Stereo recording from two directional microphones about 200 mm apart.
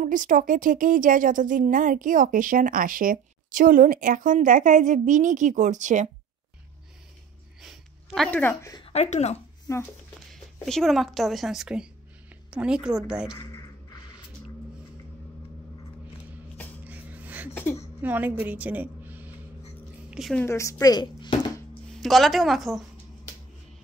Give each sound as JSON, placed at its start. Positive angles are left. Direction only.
{"t": 0.0, "sound": "speech", "side_deg": -40}
{"t": 7.6, "sound": "speech", "side_deg": 0}
{"t": 8.7, "sound": "speech", "side_deg": 30}
{"t": 9.7, "sound": "speech", "side_deg": 15}
{"t": 10.3, "sound": "a woman's voice", "side_deg": 0}
{"t": 16.8, "sound": "a sound", "side_deg": -10}
{"t": 18.0, "sound": "a woman's voice", "side_deg": -10}
{"t": 20.4, "sound": "speech", "side_deg": 15}
{"t": 22.0, "sound": "a woman's voice", "side_deg": 0}